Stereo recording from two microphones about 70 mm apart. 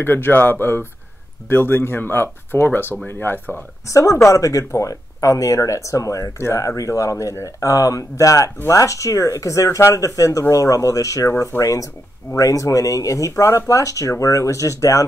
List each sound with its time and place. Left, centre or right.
0.0 s speech: left
3.8 s speech: left
13.3 s speech: left